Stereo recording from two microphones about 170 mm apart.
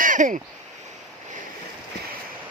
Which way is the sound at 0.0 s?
50° right (ahead or behind).